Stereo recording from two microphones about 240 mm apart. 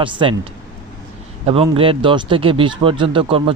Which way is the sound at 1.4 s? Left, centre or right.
Right.